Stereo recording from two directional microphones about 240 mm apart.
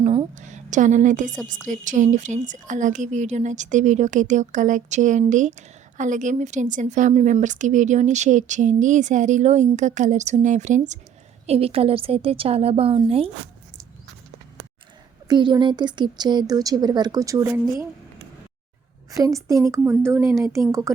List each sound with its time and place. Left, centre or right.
0.0 s a sound: right
1.5 s a woman's voice: right
15.3 s a woman's voice: centre
19.1 s a woman's voice: centre